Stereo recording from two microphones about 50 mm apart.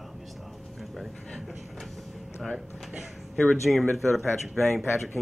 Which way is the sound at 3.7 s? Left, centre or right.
Centre.